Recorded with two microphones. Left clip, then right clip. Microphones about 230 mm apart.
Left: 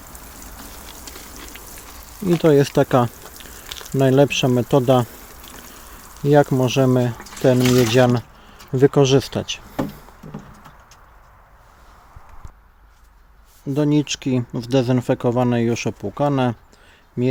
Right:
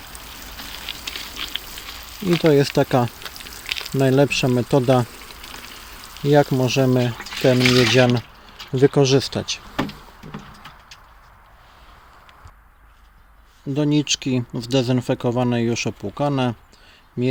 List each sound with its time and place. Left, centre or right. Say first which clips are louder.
1.5 s a sound: right 8 dB; centre
3.9 s speech: left 2 dB; centre
6.2 s speech: left 1 dB; centre
7.6 s speech: right 1 dB; centre
7.9 s speech: even; centre
10.3 s a sound: right 4 dB; centre
13.7 s speech: left 1 dB; centre